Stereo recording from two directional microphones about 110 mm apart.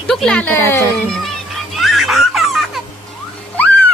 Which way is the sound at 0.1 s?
5° left (ahead or behind).